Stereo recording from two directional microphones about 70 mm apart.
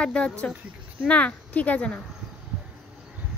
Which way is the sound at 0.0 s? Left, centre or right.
Centre.